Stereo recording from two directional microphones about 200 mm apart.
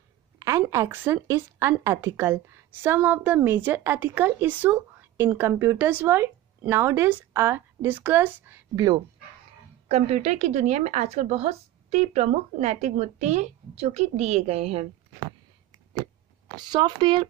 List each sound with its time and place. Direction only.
0.4 s a woman's voice: 15° right (ahead or behind)
9.8 s a woman's voice: 35° right (ahead or behind)
16.5 s speech: 20° right (ahead or behind)